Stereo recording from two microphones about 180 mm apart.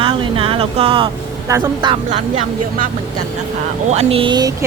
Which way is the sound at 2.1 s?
40° right (ahead or behind).